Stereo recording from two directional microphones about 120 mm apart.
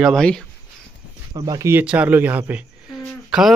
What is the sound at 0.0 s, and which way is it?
Speech, 5° left (ahead or behind).